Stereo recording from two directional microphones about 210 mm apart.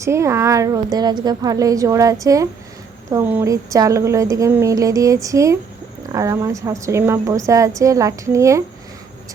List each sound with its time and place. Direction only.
0.0 s a woman's voice: 15° right (ahead or behind)